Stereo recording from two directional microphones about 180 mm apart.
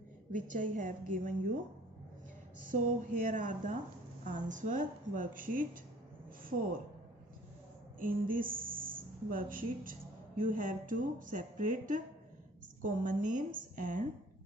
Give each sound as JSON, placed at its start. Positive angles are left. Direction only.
{"t": 0.3, "sound": "a woman's voice", "side_deg": -45}
{"t": 2.7, "sound": "a woman's voice", "side_deg": -45}
{"t": 8.0, "sound": "a woman's voice", "side_deg": -50}